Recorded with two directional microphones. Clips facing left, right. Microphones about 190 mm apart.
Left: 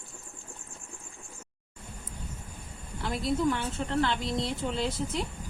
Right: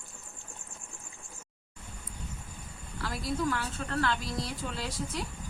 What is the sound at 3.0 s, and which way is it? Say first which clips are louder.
Speech: left 4 dB; 25° left (ahead or behind).